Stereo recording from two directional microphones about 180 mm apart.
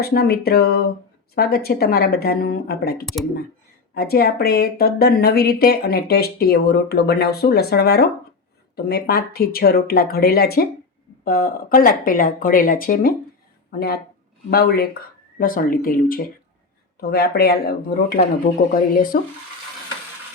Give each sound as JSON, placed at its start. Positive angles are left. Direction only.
{"t": 0.0, "sound": "speech", "side_deg": 60}